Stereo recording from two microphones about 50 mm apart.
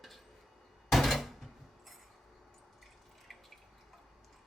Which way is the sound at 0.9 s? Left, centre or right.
Centre.